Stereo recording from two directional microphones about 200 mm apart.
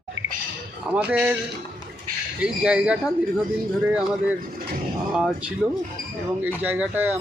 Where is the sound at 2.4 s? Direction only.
5° right (ahead or behind).